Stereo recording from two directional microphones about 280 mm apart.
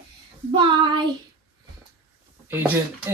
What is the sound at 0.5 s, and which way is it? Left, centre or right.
Child singing, centre.